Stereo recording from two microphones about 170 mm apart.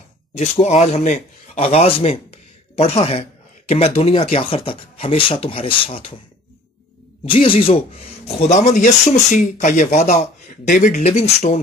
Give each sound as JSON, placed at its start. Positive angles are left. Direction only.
{"t": 0.4, "sound": "speech", "side_deg": 40}
{"t": 7.2, "sound": "speech", "side_deg": 30}
{"t": 11.1, "sound": "speech", "side_deg": 40}